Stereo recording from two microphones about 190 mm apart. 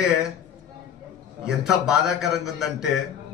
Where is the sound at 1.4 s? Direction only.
Centre (ahead or behind).